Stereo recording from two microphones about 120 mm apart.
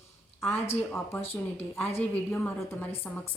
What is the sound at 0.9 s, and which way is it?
A woman's voice, 20° left (ahead or behind).